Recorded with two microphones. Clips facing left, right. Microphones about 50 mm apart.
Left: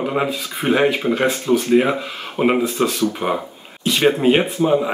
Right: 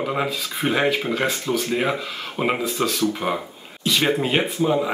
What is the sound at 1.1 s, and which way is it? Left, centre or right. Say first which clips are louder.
Speech: left 5 dB; left.